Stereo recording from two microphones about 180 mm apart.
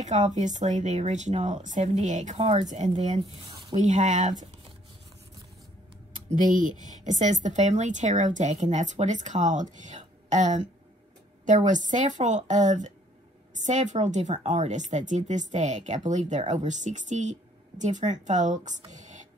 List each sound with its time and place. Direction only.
0.0 s speech: 40° right (ahead or behind)
6.1 s speech: 45° right (ahead or behind)
18.9 s whispering: 40° right (ahead or behind)